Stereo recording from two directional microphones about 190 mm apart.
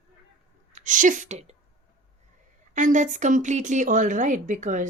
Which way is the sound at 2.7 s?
40° right (ahead or behind).